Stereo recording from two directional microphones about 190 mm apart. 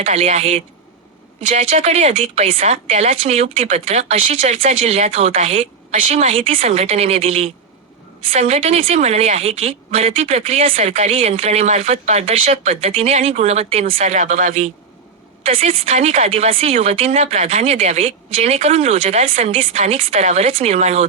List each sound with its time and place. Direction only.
0.0 s speech: 35° right (ahead or behind)